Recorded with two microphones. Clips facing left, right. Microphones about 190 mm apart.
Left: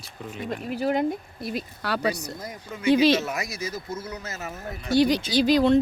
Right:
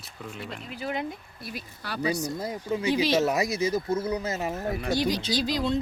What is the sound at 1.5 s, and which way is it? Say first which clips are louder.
Speech: left 5 dB; 70° left (ahead or behind).